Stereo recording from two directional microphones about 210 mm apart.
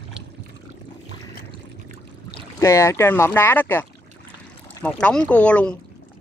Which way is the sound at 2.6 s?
15° left (ahead or behind).